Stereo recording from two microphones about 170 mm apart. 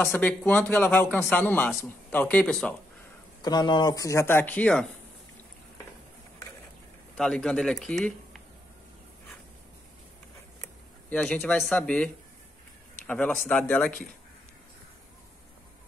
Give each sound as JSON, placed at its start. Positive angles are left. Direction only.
{"t": 0.1, "sound": "speech", "side_deg": 5}
{"t": 3.4, "sound": "speech", "side_deg": 25}
{"t": 7.2, "sound": "speech", "side_deg": 5}
{"t": 11.1, "sound": "a man's voice", "side_deg": 10}